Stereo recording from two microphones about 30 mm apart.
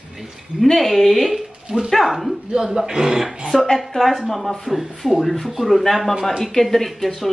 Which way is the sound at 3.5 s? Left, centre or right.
Centre.